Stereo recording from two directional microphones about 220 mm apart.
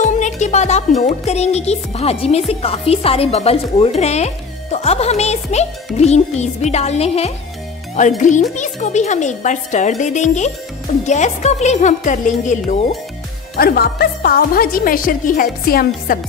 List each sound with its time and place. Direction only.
0.0 s music: 35° left (ahead or behind)
1.0 s speech: 30° left (ahead or behind)
13.6 s speech: 45° left (ahead or behind)